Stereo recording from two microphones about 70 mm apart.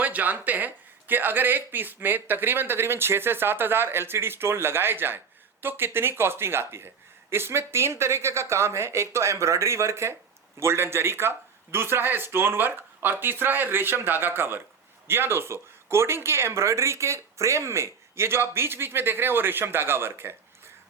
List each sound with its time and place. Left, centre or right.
0.0 s speech: right